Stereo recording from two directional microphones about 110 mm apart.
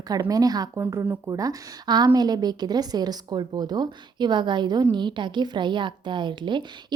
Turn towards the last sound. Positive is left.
turn(degrees=-45)  # may be behind; listen again after turning